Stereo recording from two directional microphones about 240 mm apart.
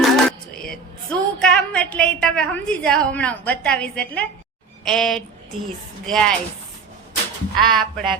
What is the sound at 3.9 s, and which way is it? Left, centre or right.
A woman's voice, centre.